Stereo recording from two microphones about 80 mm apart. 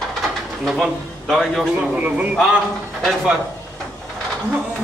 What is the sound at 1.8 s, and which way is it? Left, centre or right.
Speech, centre.